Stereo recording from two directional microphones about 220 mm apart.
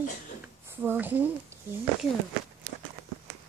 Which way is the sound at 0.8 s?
10° right (ahead or behind).